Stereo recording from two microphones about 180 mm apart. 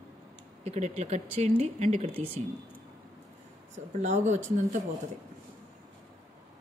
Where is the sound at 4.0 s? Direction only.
40° right (ahead or behind).